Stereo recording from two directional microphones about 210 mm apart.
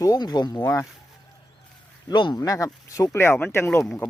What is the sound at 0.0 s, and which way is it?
Speech, 15° left (ahead or behind).